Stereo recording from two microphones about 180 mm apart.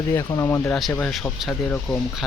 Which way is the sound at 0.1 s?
20° left (ahead or behind).